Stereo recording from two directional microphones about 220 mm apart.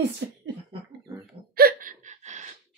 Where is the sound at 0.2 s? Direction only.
55° right (ahead or behind).